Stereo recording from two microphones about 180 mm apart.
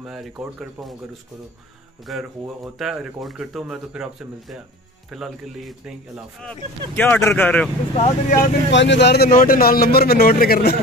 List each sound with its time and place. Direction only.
0.0 s speech: centre (ahead or behind)
2.0 s speech: centre (ahead or behind)
7.0 s speech: 10° left (ahead or behind)
7.9 s speech: 35° left (ahead or behind)
8.7 s speech: 75° left (ahead or behind); by 10.8 s 60° left (ahead or behind)